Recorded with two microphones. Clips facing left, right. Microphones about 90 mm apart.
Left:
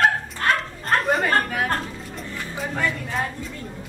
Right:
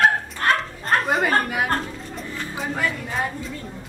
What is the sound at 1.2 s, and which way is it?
Chatter, 10° right (ahead or behind).